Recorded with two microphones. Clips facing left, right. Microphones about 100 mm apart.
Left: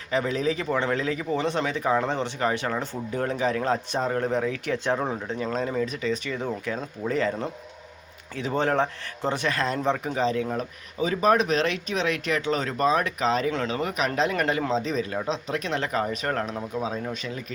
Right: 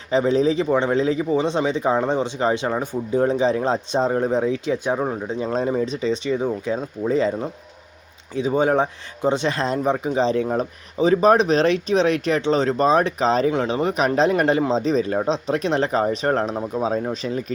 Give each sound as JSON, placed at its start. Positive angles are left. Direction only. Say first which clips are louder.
{"t": 0.1, "sound": "a man's voice", "louder": "right 7 dB", "side_deg": -25}
{"t": 5.4, "sound": "a man's voice", "louder": "right 5 dB", "side_deg": -25}
{"t": 10.2, "sound": "speech", "louder": "right 5 dB", "side_deg": -30}
{"t": 13.5, "sound": "a man's voice", "louder": "right 6 dB", "side_deg": -20}